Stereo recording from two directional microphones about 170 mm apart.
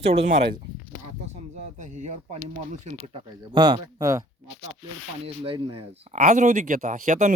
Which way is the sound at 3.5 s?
25° right (ahead or behind).